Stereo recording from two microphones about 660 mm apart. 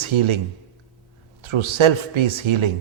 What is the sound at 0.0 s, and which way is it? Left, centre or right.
Speech, right.